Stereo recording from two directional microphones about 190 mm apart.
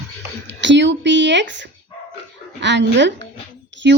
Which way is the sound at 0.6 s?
70° right (ahead or behind).